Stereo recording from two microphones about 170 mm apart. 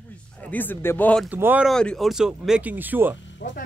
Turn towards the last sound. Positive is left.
turn(degrees=90)